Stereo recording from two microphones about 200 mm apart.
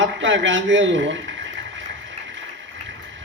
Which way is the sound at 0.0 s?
65° right (ahead or behind).